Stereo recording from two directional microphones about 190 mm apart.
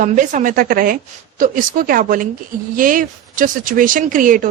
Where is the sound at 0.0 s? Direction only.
40° right (ahead or behind).